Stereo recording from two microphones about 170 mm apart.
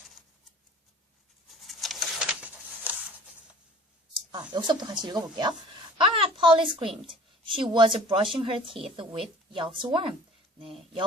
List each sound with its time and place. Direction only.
1.5 s bird: centre (ahead or behind)
4.1 s a woman's voice: 25° right (ahead or behind)